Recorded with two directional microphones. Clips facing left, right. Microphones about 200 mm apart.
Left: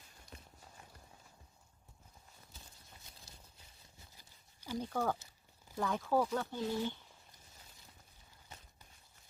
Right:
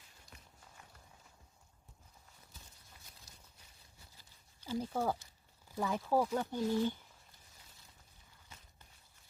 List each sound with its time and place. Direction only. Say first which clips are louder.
0.3 s walk: left 5 dB; 35° left (ahead or behind)
4.8 s speech: even; 10° right (ahead or behind)